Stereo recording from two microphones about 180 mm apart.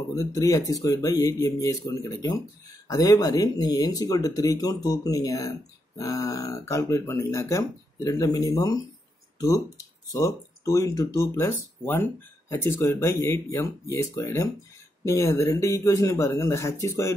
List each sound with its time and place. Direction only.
0.1 s speech: 20° left (ahead or behind)
10.1 s speech: 20° left (ahead or behind)